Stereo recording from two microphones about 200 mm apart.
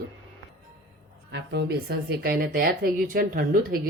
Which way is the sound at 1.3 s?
60° right (ahead or behind).